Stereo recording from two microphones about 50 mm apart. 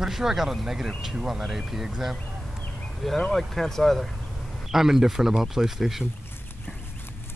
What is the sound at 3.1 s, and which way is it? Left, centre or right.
Speech, centre.